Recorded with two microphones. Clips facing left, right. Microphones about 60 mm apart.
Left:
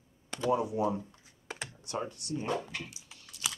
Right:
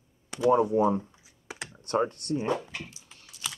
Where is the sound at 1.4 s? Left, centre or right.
Centre.